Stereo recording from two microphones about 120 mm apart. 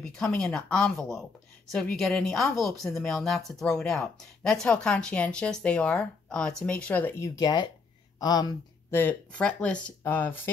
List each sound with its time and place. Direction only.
0.4 s speech: 5° left (ahead or behind)
7.3 s speech: 35° left (ahead or behind)
8.9 s speech: 15° left (ahead or behind)